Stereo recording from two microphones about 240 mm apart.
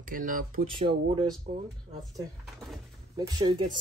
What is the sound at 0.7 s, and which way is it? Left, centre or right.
Speech, right.